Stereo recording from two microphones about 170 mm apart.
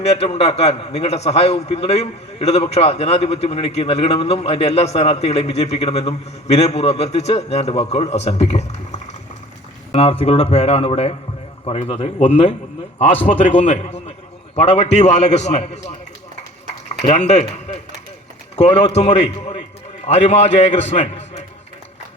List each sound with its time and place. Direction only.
0.0 s a man's voice: 40° left (ahead or behind)
17.1 s a man's voice: 45° left (ahead or behind)
18.5 s a man's voice: 40° left (ahead or behind)